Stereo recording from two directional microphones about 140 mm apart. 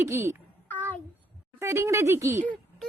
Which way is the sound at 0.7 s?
10° left (ahead or behind).